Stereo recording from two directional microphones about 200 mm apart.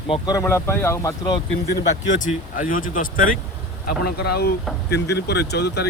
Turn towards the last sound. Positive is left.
turn(degrees=55)  # may be behind; listen again after turning